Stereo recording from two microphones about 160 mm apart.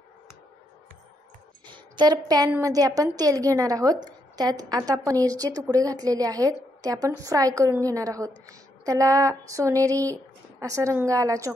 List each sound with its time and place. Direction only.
1.7 s a woman's voice: 25° right (ahead or behind)